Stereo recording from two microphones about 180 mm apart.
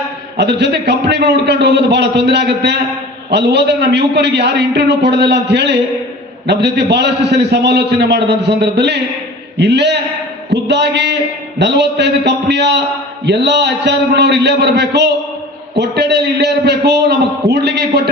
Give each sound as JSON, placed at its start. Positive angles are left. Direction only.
{"t": 0.3, "sound": "a man's voice", "side_deg": -70}